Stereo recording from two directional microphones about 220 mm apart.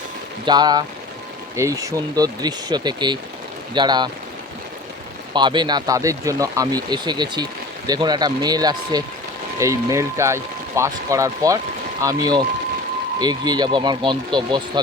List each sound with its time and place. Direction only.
0.4 s speech: 20° right (ahead or behind)
5.3 s speech: 20° right (ahead or behind)